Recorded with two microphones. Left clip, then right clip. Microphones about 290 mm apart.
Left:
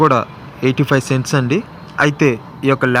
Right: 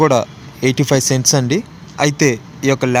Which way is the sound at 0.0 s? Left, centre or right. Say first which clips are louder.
Even; centre.